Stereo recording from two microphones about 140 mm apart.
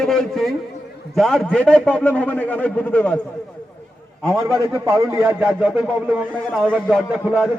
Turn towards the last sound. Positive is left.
turn(degrees=-5)  # may be behind; listen again after turning